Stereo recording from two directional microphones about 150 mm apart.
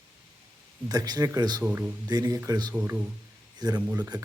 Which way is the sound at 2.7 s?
10° right (ahead or behind).